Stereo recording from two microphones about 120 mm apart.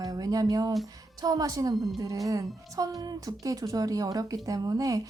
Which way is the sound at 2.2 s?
30° right (ahead or behind).